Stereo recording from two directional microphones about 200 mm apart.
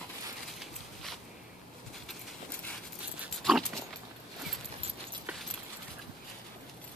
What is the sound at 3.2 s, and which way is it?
Dog, centre (ahead or behind).